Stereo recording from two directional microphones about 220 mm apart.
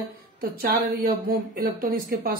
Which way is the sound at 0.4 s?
40° right (ahead or behind).